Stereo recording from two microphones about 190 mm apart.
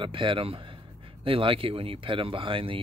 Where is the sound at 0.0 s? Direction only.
25° right (ahead or behind).